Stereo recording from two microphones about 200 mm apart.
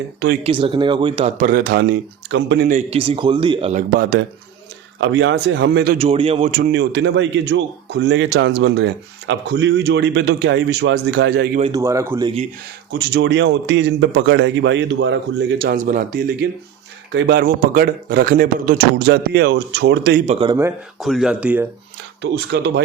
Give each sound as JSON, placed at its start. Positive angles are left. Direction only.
{"t": 0.4, "sound": "a man's voice", "side_deg": -25}
{"t": 1.4, "sound": "a man's voice", "side_deg": -45}
{"t": 2.6, "sound": "a man's voice", "side_deg": -35}
{"t": 4.9, "sound": "a man's voice", "side_deg": -65}
{"t": 6.0, "sound": "a man's voice", "side_deg": -30}
{"t": 6.7, "sound": "a man's voice", "side_deg": -60}
{"t": 11.6, "sound": "speech", "side_deg": -15}
{"t": 12.9, "sound": "a man's voice", "side_deg": -55}
{"t": 17.1, "sound": "a man's voice", "side_deg": -55}
{"t": 18.9, "sound": "a man's voice", "side_deg": -55}
{"t": 20.2, "sound": "speech", "side_deg": -35}
{"t": 20.5, "sound": "speech", "side_deg": -10}
{"t": 21.0, "sound": "speech", "side_deg": 0}
{"t": 22.2, "sound": "a man's voice", "side_deg": -60}